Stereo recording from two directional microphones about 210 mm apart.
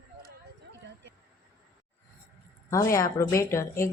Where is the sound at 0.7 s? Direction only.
55° right (ahead or behind).